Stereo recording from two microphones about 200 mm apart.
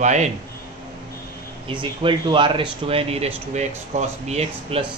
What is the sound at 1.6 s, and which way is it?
Speech, 25° right (ahead or behind).